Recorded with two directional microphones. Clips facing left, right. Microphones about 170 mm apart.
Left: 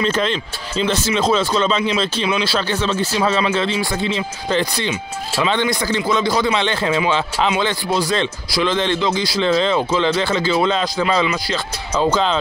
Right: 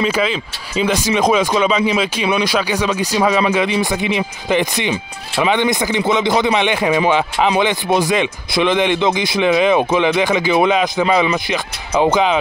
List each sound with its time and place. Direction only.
0.0 s speech: 5° right (ahead or behind)